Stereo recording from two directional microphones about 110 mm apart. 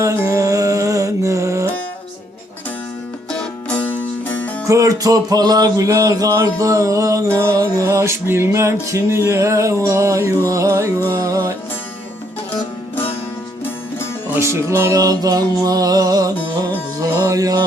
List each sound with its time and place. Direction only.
0.0 s music: 30° right (ahead or behind)
3.3 s music: 10° left (ahead or behind)
4.6 s music: 30° right (ahead or behind)
14.3 s music: 25° right (ahead or behind)